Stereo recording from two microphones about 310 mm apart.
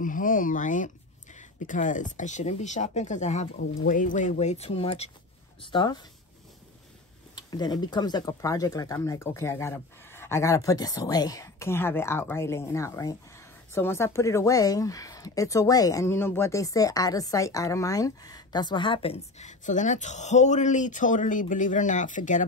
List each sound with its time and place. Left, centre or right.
0.0 s speech: left
7.3 s speech: centre